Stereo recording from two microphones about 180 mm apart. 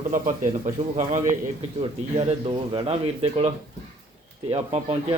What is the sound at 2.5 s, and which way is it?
Speech, 30° right (ahead or behind).